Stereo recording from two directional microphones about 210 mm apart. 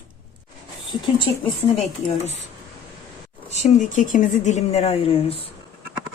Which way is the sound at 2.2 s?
30° left (ahead or behind).